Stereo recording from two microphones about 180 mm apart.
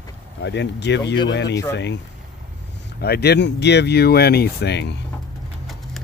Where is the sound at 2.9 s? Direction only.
60° left (ahead or behind).